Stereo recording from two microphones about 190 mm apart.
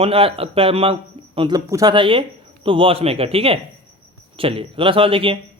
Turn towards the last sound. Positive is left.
turn(degrees=-30)  # may be behind; listen again after turning